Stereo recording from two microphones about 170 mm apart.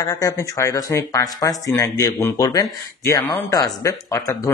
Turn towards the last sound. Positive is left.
turn(degrees=20)  # may be behind; listen again after turning